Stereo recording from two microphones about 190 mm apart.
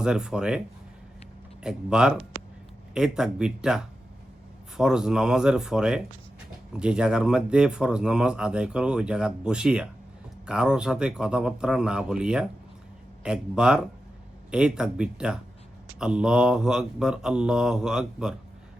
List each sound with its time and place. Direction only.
0.0 s speech: 5° right (ahead or behind)
1.6 s speech: 5° right (ahead or behind)